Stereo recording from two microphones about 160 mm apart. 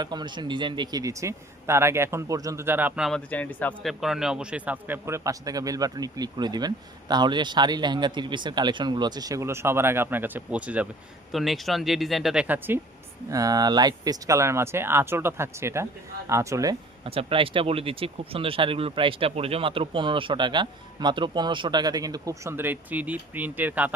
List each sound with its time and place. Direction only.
0.0 s a man's voice: 25° right (ahead or behind); by 3.1 s 10° right (ahead or behind)
3.1 s speech: 10° left (ahead or behind)
4.0 s a man's voice: 5° right (ahead or behind)
13.3 s a man's voice: 25° right (ahead or behind)
17.1 s speech: 35° right (ahead or behind); by 23.9 s 10° right (ahead or behind)